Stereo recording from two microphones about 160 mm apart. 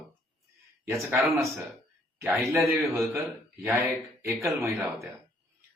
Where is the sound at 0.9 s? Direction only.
15° right (ahead or behind).